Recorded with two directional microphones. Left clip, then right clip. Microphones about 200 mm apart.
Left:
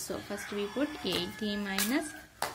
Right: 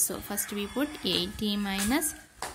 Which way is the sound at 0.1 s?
20° right (ahead or behind).